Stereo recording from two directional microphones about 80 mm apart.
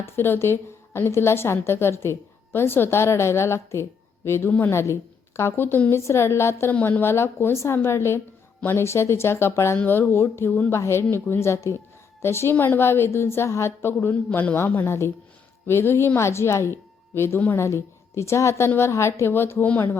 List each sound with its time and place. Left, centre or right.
0.0 s a woman's voice: left